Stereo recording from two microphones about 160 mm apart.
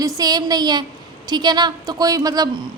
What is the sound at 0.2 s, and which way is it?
A woman's voice, 25° right (ahead or behind).